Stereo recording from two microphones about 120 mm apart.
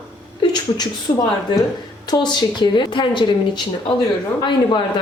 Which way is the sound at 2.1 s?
35° left (ahead or behind).